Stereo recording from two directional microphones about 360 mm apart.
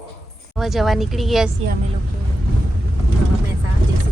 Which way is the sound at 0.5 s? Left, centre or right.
Centre.